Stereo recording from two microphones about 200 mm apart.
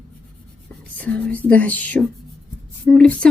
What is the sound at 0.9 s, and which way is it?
Speech, 5° left (ahead or behind).